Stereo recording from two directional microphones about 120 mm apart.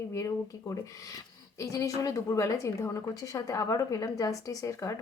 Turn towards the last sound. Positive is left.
turn(degrees=25)  # may be behind; listen again after turning